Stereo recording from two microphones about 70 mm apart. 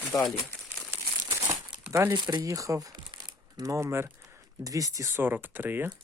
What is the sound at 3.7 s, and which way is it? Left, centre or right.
Speech, right.